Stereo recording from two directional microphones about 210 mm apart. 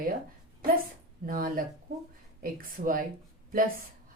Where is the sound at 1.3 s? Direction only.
45° right (ahead or behind).